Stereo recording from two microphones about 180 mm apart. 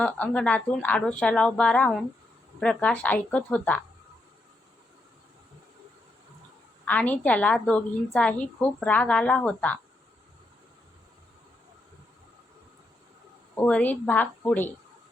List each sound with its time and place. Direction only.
0.0 s a woman's voice: 5° left (ahead or behind)
6.8 s a woman's voice: 10° left (ahead or behind)
13.6 s a woman's voice: 10° left (ahead or behind)